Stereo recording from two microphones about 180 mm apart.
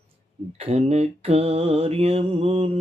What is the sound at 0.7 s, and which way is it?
Mantra, 35° right (ahead or behind).